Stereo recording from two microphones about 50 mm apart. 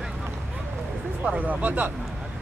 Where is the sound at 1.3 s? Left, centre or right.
Right.